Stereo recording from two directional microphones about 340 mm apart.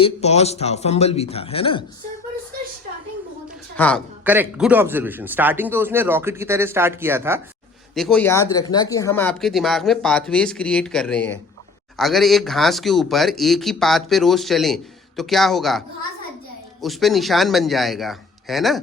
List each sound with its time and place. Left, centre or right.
0.0 s speech: centre
3.8 s a man's voice: centre
16.8 s speech: centre